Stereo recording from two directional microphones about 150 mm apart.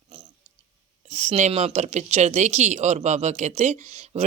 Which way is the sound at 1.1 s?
45° right (ahead or behind).